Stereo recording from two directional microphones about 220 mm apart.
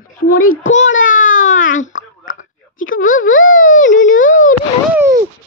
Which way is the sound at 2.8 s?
65° left (ahead or behind).